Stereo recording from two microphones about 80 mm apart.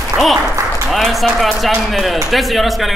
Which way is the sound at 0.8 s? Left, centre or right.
Centre.